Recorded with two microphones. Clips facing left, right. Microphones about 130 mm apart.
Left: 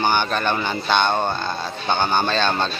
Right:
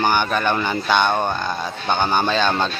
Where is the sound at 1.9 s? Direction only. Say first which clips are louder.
Right 1 dB; 10° right (ahead or behind).